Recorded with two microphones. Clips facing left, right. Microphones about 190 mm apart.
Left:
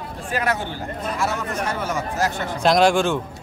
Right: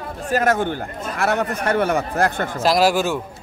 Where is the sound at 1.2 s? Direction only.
60° right (ahead or behind).